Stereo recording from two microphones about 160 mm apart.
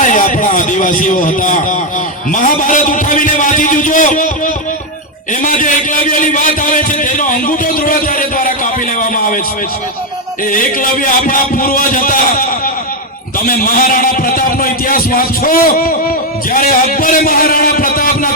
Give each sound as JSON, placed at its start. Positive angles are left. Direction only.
{"t": 0.0, "sound": "a sound", "side_deg": 55}
{"t": 10.5, "sound": "a man's voice", "side_deg": 55}
{"t": 13.4, "sound": "a man's voice", "side_deg": 60}